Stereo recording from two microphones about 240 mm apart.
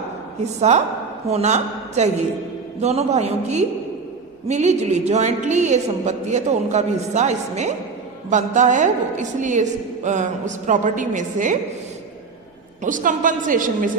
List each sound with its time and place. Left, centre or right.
1.3 s a woman's voice: right
12.8 s a woman's voice: right